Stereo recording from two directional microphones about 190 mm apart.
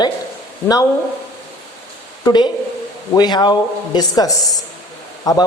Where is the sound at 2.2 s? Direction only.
20° left (ahead or behind).